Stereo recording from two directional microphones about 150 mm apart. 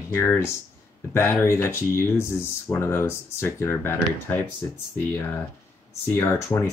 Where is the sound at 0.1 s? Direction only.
15° left (ahead or behind).